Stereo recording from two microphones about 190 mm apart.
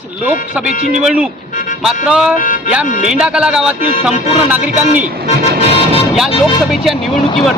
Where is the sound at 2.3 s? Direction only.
45° left (ahead or behind).